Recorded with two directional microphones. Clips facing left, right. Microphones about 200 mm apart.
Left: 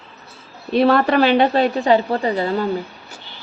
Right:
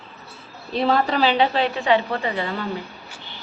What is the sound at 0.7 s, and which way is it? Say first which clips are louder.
A woman's voice: left 6 dB; 65° left (ahead or behind).